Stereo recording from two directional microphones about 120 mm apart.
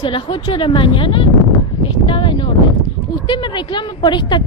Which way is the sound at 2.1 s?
45° left (ahead or behind).